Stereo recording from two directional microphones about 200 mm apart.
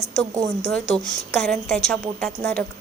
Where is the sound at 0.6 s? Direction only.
Centre (ahead or behind).